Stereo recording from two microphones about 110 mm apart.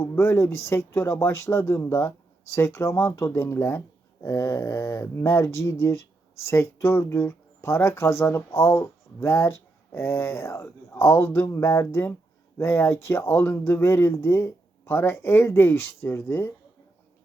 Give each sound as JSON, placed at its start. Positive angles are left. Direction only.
{"t": 0.0, "sound": "speech", "side_deg": 20}